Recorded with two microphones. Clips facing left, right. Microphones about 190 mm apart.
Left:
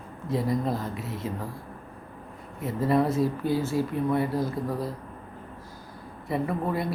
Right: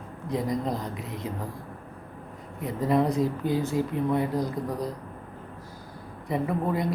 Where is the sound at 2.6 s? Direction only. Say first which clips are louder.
Even; 15° right (ahead or behind).